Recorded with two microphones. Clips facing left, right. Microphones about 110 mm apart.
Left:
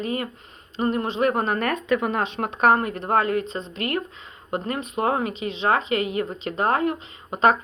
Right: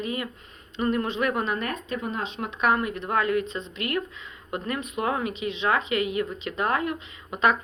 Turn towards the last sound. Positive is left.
turn(degrees=35)  # may be behind; listen again after turning